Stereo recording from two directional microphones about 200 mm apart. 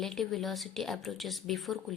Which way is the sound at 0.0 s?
Centre (ahead or behind).